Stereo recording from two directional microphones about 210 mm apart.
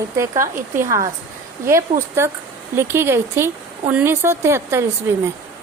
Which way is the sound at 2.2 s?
15° right (ahead or behind).